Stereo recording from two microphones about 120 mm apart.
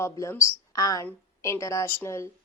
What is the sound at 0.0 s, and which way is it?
A woman's voice, 25° left (ahead or behind).